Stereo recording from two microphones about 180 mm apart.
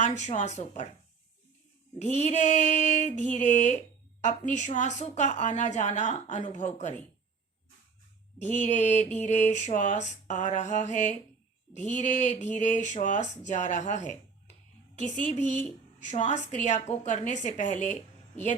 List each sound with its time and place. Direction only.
0.0 s mantra: 40° left (ahead or behind)
2.0 s mantra: 40° left (ahead or behind)
8.4 s mantra: 40° left (ahead or behind)
16.0 s mantra: 40° left (ahead or behind)